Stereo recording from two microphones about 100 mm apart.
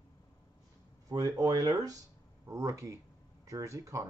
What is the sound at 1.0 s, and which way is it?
Speech, 40° right (ahead or behind).